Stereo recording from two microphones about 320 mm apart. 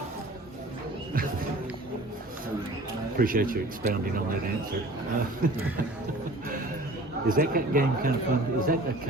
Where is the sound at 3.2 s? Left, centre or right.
Right.